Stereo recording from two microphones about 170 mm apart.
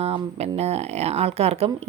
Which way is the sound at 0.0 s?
40° right (ahead or behind).